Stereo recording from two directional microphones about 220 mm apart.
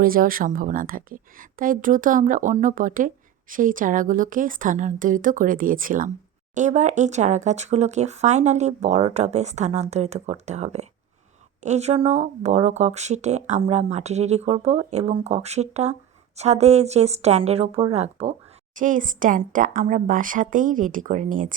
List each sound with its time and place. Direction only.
0.0 s a woman's voice: 40° right (ahead or behind)